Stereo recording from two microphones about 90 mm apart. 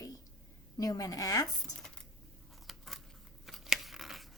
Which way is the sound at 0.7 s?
45° left (ahead or behind).